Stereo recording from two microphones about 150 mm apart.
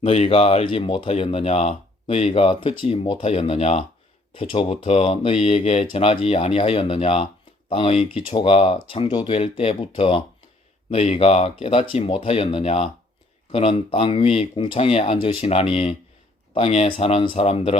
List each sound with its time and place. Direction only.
0.0 s speech: 40° left (ahead or behind)